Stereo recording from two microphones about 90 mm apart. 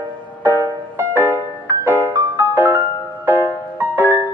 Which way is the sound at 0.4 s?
25° right (ahead or behind).